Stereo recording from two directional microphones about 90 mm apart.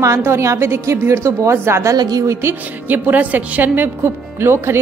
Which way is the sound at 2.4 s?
25° right (ahead or behind).